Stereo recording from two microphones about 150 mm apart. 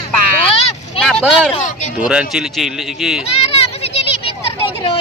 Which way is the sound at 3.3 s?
40° left (ahead or behind).